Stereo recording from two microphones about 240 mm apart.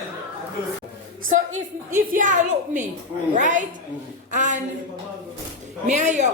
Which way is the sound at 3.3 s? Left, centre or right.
Right.